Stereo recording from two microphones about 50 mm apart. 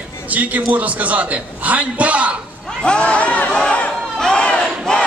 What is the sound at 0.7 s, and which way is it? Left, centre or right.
A man's voice, right.